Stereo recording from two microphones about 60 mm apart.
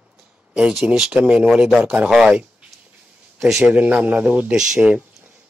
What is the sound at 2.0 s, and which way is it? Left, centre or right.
Speech, centre.